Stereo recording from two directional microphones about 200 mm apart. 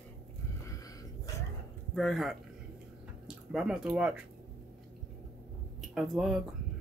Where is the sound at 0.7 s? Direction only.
15° left (ahead or behind).